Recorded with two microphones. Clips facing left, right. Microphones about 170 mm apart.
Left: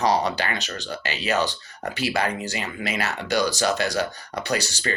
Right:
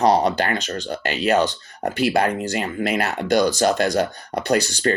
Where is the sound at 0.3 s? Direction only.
55° right (ahead or behind).